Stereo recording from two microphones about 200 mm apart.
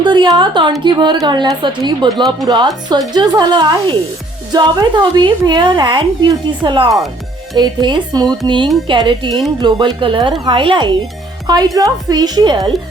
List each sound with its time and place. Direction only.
0.0 s a woman's voice: 25° right (ahead or behind)